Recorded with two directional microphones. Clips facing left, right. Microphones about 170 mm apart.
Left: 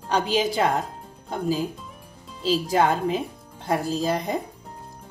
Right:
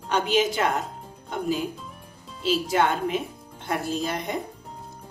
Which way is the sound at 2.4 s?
35° left (ahead or behind).